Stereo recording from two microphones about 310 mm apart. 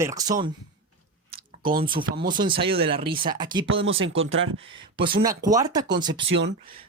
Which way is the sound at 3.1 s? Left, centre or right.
Centre.